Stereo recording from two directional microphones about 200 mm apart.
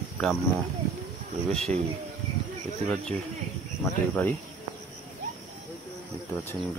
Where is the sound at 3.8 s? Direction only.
10° left (ahead or behind).